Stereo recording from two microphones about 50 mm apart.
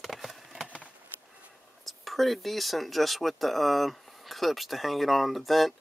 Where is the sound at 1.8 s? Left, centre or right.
Centre.